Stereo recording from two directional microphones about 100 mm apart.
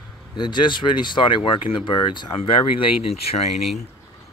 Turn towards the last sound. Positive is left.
turn(degrees=90)